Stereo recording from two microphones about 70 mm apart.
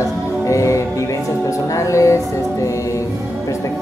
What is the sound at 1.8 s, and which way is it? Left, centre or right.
Music, left.